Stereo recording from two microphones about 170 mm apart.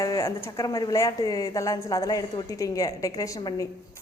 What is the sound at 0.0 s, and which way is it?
A woman's voice, 20° left (ahead or behind).